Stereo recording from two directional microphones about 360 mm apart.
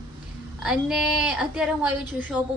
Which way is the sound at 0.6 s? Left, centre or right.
Centre.